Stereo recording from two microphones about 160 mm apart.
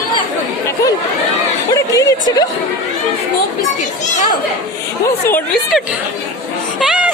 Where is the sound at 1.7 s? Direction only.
20° left (ahead or behind).